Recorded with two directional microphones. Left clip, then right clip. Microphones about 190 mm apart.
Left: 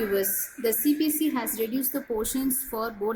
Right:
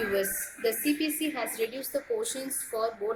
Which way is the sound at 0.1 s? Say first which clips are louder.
Left 2 dB; 55° left (ahead or behind).